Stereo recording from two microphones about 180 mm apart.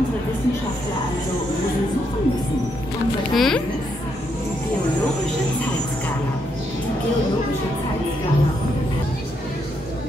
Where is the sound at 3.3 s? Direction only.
Centre (ahead or behind).